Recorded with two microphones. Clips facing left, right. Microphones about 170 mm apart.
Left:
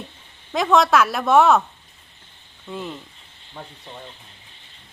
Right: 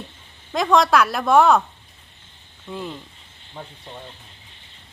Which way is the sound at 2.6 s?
Centre (ahead or behind).